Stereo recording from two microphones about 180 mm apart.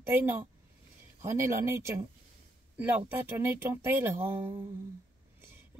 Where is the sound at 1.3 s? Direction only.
15° right (ahead or behind).